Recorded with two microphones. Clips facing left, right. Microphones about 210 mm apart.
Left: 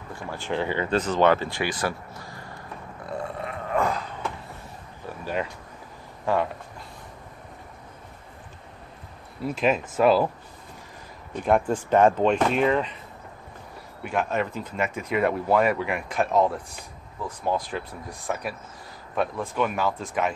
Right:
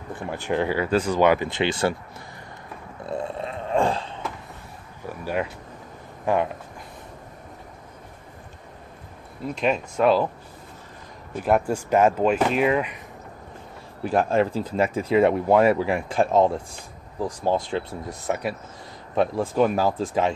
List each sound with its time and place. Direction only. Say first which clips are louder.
0.1 s speech: right 4 dB; 15° right (ahead or behind)
3.1 s burping: right 3 dB; 25° right (ahead or behind)
5.2 s speech: right 2 dB; 10° right (ahead or behind)
9.4 s speech: even; 5° left (ahead or behind)
11.3 s speech: right 1 dB; 5° right (ahead or behind)
14.0 s speech: right 5 dB; 35° right (ahead or behind)